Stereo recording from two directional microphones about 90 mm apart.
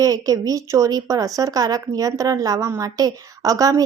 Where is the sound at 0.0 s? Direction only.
45° right (ahead or behind).